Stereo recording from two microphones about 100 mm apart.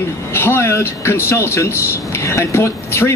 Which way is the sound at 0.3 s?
25° left (ahead or behind).